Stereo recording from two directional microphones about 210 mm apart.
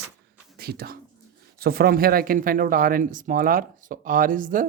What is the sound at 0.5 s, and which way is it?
Speech, 45° right (ahead or behind).